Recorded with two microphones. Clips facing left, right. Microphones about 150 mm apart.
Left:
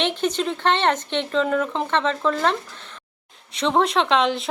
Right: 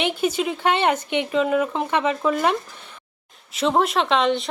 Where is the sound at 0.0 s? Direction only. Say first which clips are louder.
Even; 10° right (ahead or behind).